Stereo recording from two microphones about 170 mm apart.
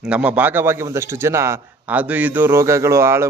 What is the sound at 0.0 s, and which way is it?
A man's voice, 5° right (ahead or behind).